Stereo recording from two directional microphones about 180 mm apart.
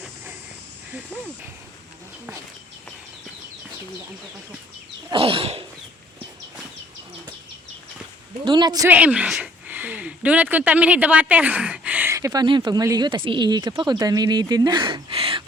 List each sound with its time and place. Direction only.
5.1 s a sound: 30° right (ahead or behind)
8.4 s a man's voice: 25° right (ahead or behind)
8.9 s speech: 10° right (ahead or behind); by 15.4 s 30° right (ahead or behind)